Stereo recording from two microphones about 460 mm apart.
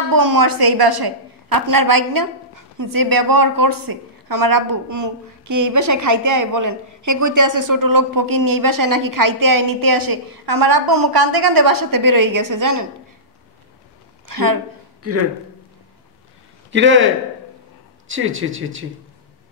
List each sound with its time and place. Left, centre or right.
0.1 s a woman's voice: right
14.2 s a sound: right
16.7 s speech: right